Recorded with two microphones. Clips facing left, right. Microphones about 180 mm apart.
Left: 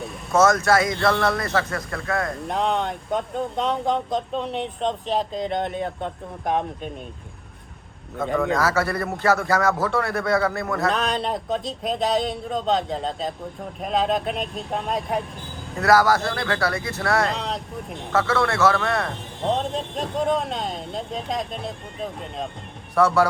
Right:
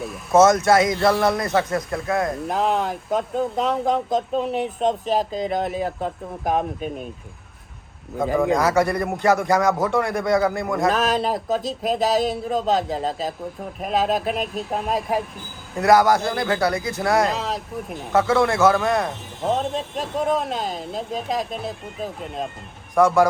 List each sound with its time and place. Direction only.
0.3 s speech: 20° right (ahead or behind)
2.5 s speech: 5° right (ahead or behind)
8.5 s a man's voice: 15° right (ahead or behind)
10.8 s speech: centre (ahead or behind)
15.8 s speech: 20° right (ahead or behind)
16.7 s speech: centre (ahead or behind)
17.0 s speech: 20° right (ahead or behind)
17.2 s speech: centre (ahead or behind)
18.1 s a man's voice: 20° right (ahead or behind)
19.0 s a man's voice: 5° right (ahead or behind)